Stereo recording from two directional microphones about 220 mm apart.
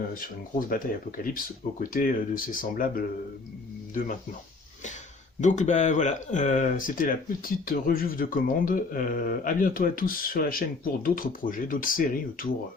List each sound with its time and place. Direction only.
0.7 s speech: 40° left (ahead or behind)
5.4 s speech: 35° left (ahead or behind)